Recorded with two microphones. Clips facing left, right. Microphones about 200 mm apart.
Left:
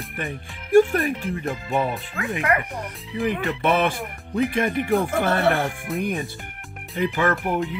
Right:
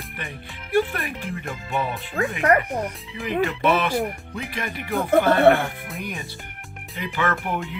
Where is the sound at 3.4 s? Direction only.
50° left (ahead or behind).